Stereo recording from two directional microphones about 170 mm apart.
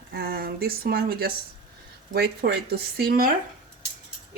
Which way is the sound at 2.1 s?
75° right (ahead or behind).